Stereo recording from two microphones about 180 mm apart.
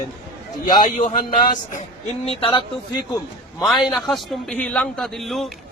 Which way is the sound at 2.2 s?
30° left (ahead or behind).